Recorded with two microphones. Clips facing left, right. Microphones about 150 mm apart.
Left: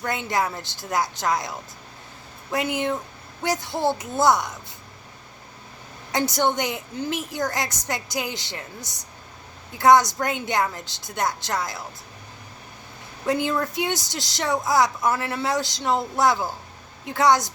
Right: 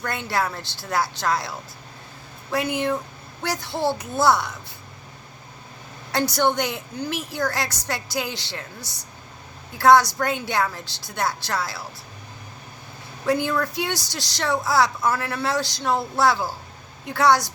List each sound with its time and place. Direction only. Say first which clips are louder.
0.0 s a woman's voice: left 1 dB; 20° left (ahead or behind)
6.1 s a woman's voice: right 1 dB; 20° left (ahead or behind)
13.2 s a woman's voice: right 1 dB; 20° left (ahead or behind)